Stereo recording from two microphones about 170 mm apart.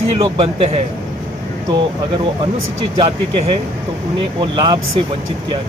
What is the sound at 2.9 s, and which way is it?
Speech, 30° right (ahead or behind).